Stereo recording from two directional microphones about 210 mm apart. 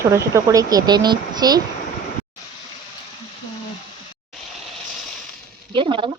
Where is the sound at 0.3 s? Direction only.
15° right (ahead or behind).